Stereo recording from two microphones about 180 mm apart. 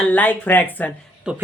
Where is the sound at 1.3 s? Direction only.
5° right (ahead or behind).